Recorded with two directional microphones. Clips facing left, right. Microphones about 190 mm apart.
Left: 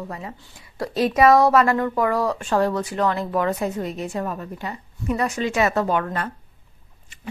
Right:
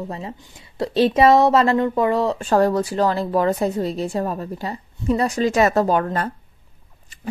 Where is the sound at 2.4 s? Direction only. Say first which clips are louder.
Right 4 dB; 40° right (ahead or behind).